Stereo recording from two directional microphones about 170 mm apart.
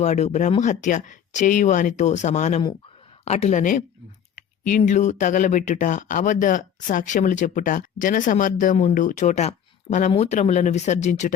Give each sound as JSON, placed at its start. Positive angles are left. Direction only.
{"t": 0.0, "sound": "speech", "side_deg": 45}
{"t": 4.9, "sound": "speech", "side_deg": 45}